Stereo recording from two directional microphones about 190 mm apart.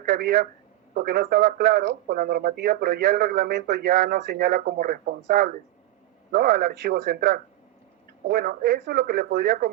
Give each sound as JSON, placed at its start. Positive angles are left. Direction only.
{"t": 0.0, "sound": "speech", "side_deg": -55}